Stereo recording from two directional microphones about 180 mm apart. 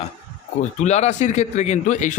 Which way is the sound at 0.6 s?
40° left (ahead or behind).